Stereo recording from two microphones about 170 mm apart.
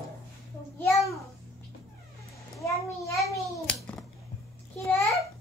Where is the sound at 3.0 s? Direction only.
20° left (ahead or behind).